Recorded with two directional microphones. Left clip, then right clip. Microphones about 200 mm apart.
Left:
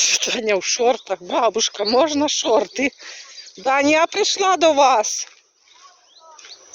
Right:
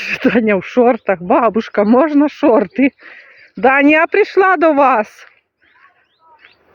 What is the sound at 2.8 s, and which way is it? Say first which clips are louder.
Speech: right 6 dB; 5° right (ahead or behind).